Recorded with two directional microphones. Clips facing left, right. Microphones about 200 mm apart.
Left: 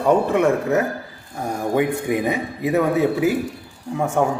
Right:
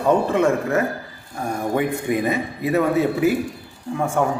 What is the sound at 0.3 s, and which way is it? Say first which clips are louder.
Speech: left 1 dB; 15° left (ahead or behind).